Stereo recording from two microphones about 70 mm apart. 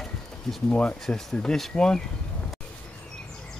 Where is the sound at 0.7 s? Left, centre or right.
Centre.